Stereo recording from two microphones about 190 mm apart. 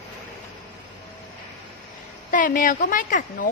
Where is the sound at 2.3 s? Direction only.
45° left (ahead or behind).